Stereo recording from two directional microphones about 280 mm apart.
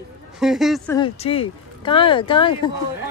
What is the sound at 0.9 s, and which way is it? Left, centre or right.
Speech, centre.